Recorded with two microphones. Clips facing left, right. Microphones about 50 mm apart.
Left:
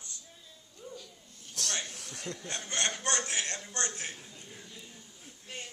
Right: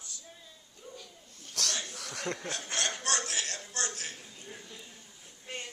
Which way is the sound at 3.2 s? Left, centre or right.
Left.